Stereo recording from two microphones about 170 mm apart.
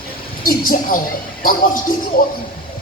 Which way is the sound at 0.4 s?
55° left (ahead or behind).